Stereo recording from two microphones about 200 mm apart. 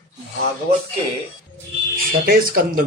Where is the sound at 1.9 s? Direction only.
45° right (ahead or behind).